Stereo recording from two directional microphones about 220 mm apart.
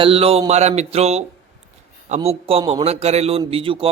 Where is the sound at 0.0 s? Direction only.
25° right (ahead or behind).